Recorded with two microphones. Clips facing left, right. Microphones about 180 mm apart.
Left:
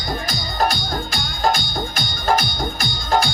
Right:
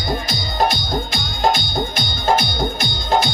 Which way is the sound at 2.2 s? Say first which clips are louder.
Right 2 dB; 25° right (ahead or behind).